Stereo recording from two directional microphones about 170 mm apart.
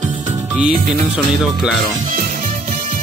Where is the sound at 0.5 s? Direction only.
5° right (ahead or behind).